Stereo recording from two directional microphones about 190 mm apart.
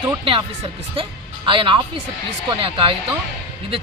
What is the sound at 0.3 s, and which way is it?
Speech, 30° right (ahead or behind).